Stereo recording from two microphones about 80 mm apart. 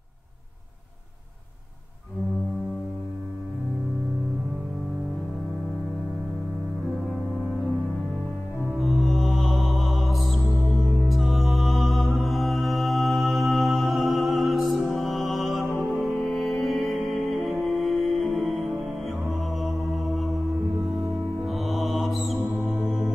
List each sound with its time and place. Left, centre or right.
8.7 s music: centre
21.5 s mantra: centre
22.8 s music: centre